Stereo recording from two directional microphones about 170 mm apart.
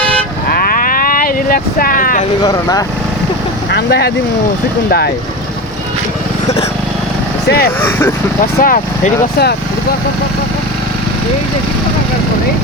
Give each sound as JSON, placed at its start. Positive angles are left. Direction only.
{"t": 0.5, "sound": "vehicle", "side_deg": 60}
{"t": 2.4, "sound": "speech", "side_deg": 20}
{"t": 3.7, "sound": "speech", "side_deg": 75}
{"t": 7.4, "sound": "speech", "side_deg": 65}
{"t": 7.8, "sound": "speech", "side_deg": 10}
{"t": 8.6, "sound": "speech", "side_deg": 55}